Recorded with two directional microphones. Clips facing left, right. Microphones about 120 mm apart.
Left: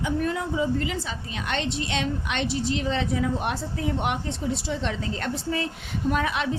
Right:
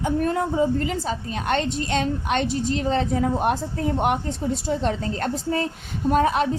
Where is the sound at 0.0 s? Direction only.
40° right (ahead or behind).